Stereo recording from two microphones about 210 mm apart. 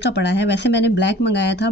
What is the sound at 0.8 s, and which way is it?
Speech, 55° left (ahead or behind).